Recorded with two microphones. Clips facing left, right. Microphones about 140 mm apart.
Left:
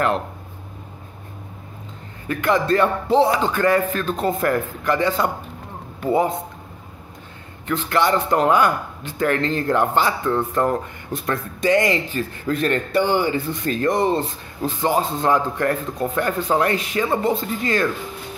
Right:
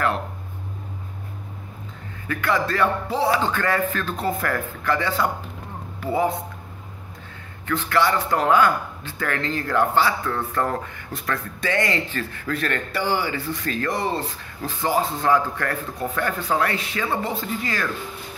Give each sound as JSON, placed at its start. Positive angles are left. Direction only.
{"t": 2.2, "sound": "speech", "side_deg": 20}
{"t": 7.6, "sound": "speech", "side_deg": 20}